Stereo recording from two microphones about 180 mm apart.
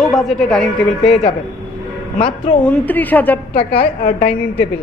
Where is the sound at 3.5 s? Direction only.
30° left (ahead or behind).